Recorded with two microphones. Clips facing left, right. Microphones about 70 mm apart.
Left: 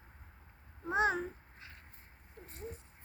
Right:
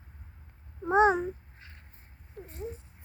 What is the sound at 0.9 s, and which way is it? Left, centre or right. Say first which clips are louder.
Babbling: right 9 dB; right.